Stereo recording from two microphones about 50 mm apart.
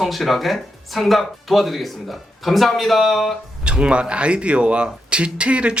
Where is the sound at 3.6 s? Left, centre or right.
Right.